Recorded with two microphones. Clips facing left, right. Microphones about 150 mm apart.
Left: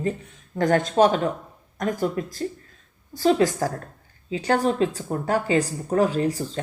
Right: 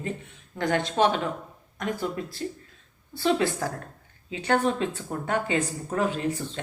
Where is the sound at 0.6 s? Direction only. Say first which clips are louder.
Left 5 dB; 45° left (ahead or behind).